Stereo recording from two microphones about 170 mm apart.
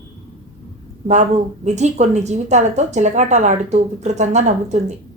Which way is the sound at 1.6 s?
40° right (ahead or behind).